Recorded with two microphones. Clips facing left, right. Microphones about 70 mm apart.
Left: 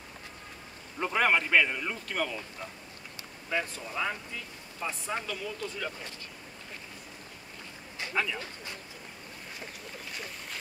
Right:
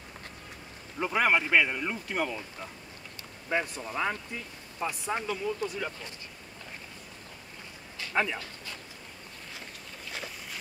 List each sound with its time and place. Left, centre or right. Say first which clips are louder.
0.9 s speech: right 1 dB; centre
3.4 s speech: right 2 dB; right
8.1 s speech: right 3 dB; right